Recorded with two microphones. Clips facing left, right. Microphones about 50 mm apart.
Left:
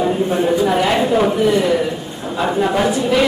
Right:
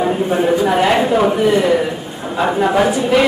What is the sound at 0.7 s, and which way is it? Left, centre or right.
Speech, right.